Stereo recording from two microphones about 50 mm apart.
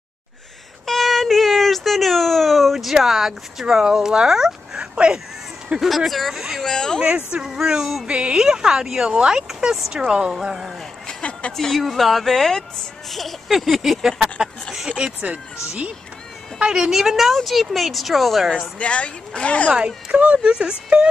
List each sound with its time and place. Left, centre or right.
0.8 s a sound: centre
4.9 s speech: centre
5.8 s speech: centre
6.6 s speech: centre
7.0 s speech: right
7.4 s speech: centre
8.1 s speech: centre
10.4 s speech: centre
11.1 s a sound: left
11.5 s speech: centre
16.5 s speech: centre
18.8 s speech: left
20.1 s speech: right
20.4 s speech: centre